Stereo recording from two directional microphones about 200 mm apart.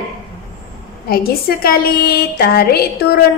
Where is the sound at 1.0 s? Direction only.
50° left (ahead or behind).